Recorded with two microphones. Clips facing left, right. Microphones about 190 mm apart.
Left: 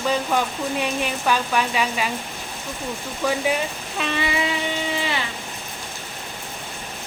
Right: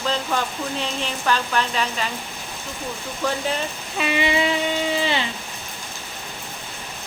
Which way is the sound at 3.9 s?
5° right (ahead or behind).